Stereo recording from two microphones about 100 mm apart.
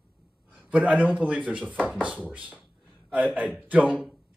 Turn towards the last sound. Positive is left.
turn(degrees=-15)  # may be behind; listen again after turning